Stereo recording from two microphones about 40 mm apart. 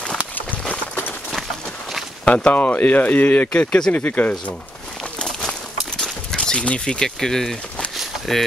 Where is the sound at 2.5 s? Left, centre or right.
Left.